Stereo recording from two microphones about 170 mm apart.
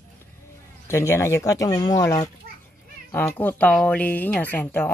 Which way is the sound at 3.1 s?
10° left (ahead or behind).